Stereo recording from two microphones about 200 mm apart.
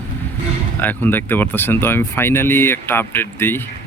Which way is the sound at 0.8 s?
10° left (ahead or behind).